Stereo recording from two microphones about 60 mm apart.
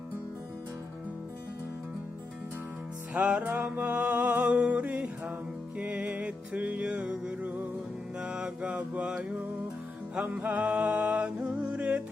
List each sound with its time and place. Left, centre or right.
3.2 s music: right
6.8 s music: centre
7.4 s music: right
8.2 s mantra: centre
10.2 s music: right